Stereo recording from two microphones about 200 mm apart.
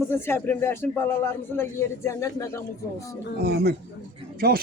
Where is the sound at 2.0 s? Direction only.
15° left (ahead or behind).